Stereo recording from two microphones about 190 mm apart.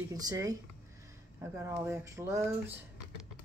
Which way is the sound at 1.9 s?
15° right (ahead or behind).